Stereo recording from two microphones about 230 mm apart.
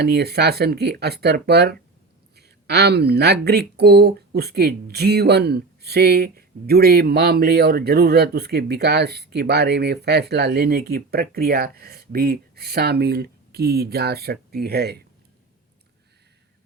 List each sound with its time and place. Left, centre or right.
0.0 s speech: right